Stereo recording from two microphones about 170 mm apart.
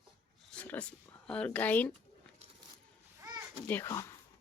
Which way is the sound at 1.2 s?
5° left (ahead or behind).